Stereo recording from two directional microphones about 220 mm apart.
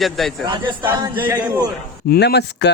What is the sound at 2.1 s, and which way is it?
Speech, 50° left (ahead or behind).